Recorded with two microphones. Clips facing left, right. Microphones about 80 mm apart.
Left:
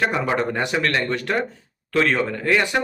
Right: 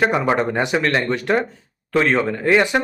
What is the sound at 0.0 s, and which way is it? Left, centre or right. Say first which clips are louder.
Speech: right 4 dB; right.